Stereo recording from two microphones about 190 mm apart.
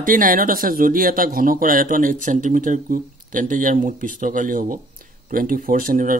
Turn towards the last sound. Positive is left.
turn(degrees=-45)  # may be behind; listen again after turning